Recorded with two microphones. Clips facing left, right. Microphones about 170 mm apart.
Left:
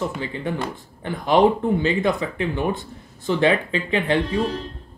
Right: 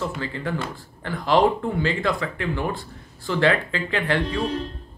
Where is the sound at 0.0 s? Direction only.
20° left (ahead or behind).